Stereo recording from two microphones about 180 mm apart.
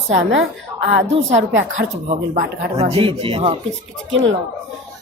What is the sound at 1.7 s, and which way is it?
Speech, 40° right (ahead or behind).